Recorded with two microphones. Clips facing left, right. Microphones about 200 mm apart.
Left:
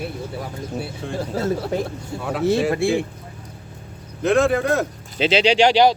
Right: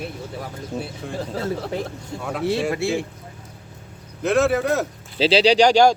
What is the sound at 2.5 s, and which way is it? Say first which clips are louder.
Speech: left 4 dB; 50° left (ahead or behind).